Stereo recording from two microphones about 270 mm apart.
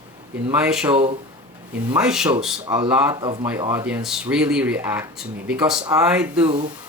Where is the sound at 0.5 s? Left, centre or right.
Centre.